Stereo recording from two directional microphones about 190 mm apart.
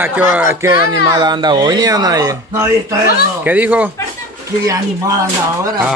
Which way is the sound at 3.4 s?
10° right (ahead or behind).